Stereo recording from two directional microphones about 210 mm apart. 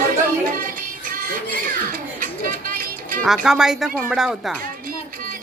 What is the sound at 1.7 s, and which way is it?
Music, 40° right (ahead or behind).